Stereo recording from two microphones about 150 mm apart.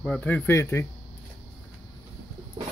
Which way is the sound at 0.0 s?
10° left (ahead or behind).